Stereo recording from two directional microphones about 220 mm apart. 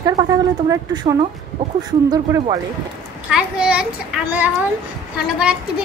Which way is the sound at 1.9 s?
20° right (ahead or behind).